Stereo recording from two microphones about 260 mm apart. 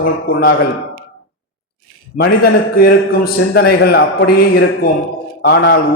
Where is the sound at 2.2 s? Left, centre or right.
Left.